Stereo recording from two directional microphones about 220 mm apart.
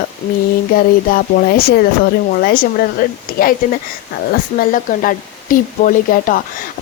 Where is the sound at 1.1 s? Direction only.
45° left (ahead or behind).